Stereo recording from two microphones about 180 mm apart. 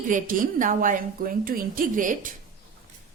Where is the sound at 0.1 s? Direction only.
50° right (ahead or behind).